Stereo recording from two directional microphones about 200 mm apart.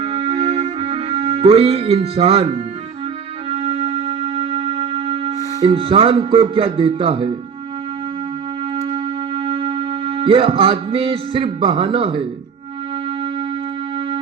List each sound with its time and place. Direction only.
0.8 s speech: 30° right (ahead or behind)
3.7 s music: 30° right (ahead or behind)
5.6 s speech: 25° right (ahead or behind)
9.3 s music: 30° right (ahead or behind)